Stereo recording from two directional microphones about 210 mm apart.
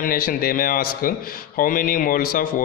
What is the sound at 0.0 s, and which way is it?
A man's voice, 45° left (ahead or behind).